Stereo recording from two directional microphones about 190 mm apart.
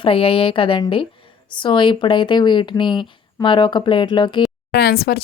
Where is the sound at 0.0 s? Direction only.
30° left (ahead or behind).